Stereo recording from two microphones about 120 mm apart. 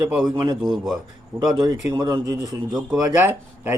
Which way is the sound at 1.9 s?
30° right (ahead or behind).